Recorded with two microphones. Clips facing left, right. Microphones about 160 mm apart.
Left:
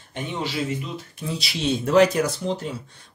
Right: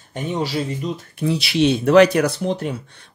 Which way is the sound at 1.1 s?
65° right (ahead or behind).